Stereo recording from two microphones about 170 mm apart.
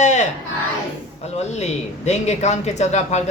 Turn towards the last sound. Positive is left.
turn(degrees=40)  # may be behind; listen again after turning